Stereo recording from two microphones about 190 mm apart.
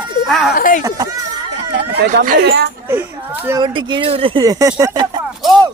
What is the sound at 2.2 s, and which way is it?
Speech, 55° right (ahead or behind).